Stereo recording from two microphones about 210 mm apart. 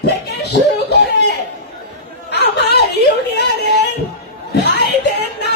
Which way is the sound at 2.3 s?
55° left (ahead or behind).